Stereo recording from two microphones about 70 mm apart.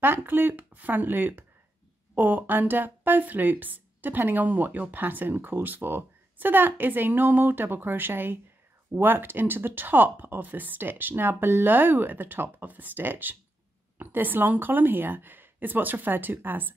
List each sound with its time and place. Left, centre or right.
0.0 s speech: right